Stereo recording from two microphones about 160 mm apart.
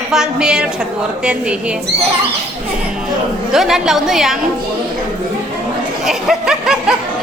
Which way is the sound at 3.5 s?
Centre (ahead or behind).